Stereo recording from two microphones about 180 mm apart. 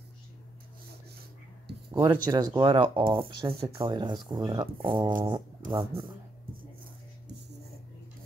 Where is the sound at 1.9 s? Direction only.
25° right (ahead or behind).